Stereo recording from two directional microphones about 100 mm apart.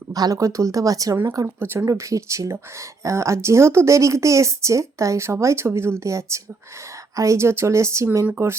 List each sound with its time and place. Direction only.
0.1 s a woman's voice: 40° right (ahead or behind)
1.5 s a woman's voice: 20° right (ahead or behind)